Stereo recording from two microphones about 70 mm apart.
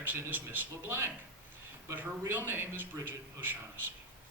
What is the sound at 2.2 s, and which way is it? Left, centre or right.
Speech, right.